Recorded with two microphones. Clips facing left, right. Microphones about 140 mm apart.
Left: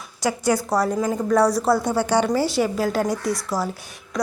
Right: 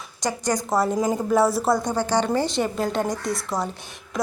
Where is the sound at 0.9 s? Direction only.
15° right (ahead or behind).